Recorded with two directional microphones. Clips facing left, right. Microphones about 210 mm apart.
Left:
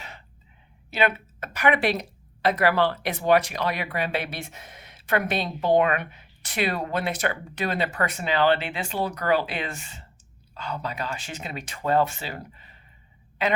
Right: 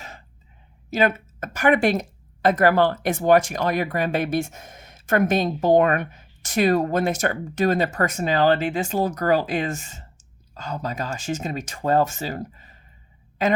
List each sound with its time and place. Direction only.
0.9 s speech: 45° right (ahead or behind)